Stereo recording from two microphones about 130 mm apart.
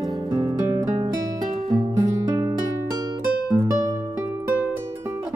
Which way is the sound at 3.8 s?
30° right (ahead or behind).